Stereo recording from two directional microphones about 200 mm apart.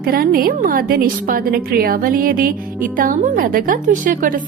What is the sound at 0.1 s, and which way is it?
A woman's voice, 45° right (ahead or behind).